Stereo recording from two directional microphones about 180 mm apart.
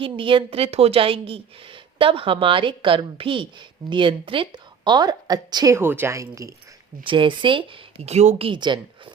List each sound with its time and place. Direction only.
0.0 s a woman's voice: 30° right (ahead or behind)
7.0 s a woman's voice: 30° right (ahead or behind)